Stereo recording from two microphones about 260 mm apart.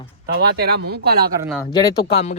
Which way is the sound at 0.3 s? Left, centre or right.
Right.